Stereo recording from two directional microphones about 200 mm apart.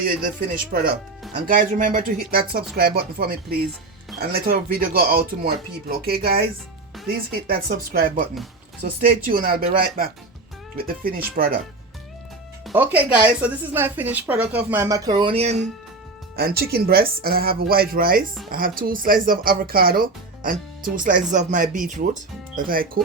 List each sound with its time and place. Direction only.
0.7 s speech: 45° right (ahead or behind)
12.7 s a woman's voice: 10° right (ahead or behind); by 15.6 s 30° right (ahead or behind)
16.3 s speech: 50° right (ahead or behind)